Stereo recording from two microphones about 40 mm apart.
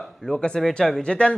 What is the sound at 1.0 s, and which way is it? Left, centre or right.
Speech, left.